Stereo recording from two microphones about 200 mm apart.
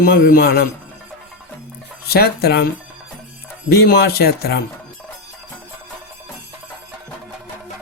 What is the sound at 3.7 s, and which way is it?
Speech, 55° left (ahead or behind).